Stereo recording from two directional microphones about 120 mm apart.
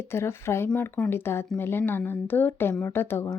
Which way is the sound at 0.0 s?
20° left (ahead or behind).